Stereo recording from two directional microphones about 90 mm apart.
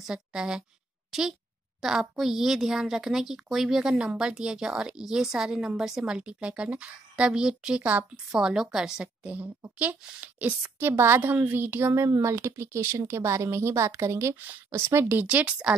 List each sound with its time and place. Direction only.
0.0 s a woman's voice: 10° right (ahead or behind); by 14.3 s 30° right (ahead or behind)
14.3 s a woman's voice: 20° right (ahead or behind)